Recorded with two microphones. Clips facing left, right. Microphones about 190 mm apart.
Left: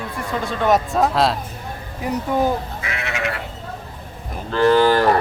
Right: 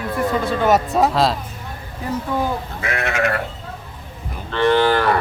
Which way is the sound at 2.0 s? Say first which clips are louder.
Left 1 dB; 15° left (ahead or behind).